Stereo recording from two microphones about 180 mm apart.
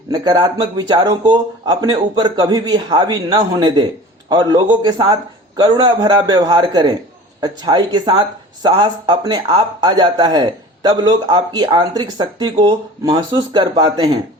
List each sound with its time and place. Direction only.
0.1 s speech: 25° right (ahead or behind)